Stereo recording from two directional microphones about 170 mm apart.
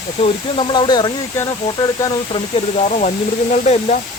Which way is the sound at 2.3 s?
40° left (ahead or behind).